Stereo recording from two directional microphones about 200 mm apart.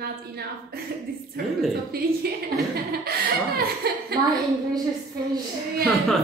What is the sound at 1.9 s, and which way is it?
Speech, 50° right (ahead or behind).